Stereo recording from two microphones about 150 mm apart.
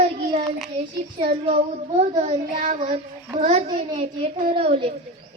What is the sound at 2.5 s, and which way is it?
Child singing, 60° right (ahead or behind).